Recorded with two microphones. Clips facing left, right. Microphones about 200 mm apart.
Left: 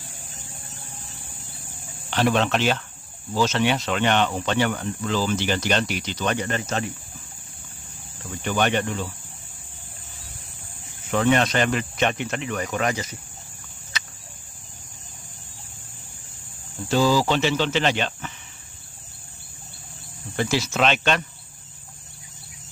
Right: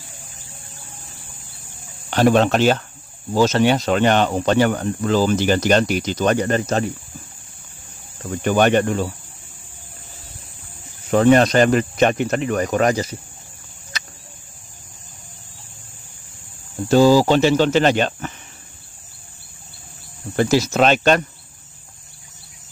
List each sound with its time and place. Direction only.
2.0 s speech: 45° right (ahead or behind)
8.2 s speech: 45° right (ahead or behind)
11.1 s speech: 40° right (ahead or behind)
13.9 s cricket: 40° right (ahead or behind)
16.9 s speech: 45° right (ahead or behind)
20.3 s speech: 45° right (ahead or behind)